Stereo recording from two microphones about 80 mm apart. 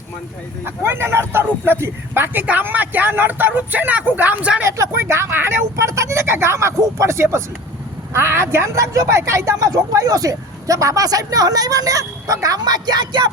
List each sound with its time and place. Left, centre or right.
0.6 s speech: right
4.6 s speech: right